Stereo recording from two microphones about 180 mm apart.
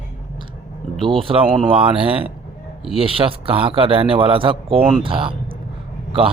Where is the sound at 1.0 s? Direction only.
30° right (ahead or behind).